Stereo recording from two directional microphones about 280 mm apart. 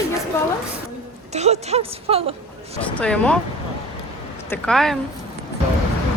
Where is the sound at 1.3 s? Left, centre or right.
Right.